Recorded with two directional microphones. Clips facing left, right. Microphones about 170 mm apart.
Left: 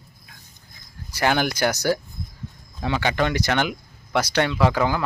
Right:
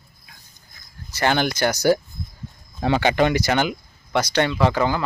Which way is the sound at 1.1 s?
5° left (ahead or behind).